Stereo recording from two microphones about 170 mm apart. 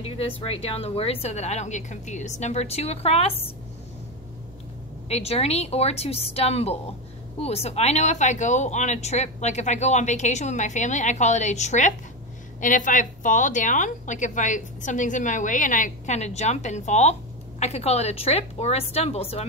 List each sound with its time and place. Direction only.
0.0 s speech: 35° left (ahead or behind)
5.0 s a woman's voice: 35° left (ahead or behind)